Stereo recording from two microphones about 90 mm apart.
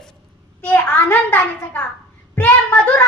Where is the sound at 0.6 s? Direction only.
20° left (ahead or behind).